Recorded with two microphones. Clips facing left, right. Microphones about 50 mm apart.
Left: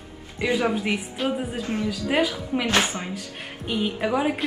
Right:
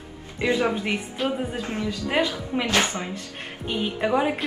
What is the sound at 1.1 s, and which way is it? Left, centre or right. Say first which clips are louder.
Speech: even; centre.